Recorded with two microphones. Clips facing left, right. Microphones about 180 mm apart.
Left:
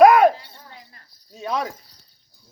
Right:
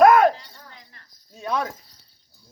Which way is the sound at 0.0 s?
5° left (ahead or behind).